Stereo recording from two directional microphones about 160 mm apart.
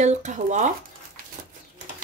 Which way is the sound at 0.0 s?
45° right (ahead or behind).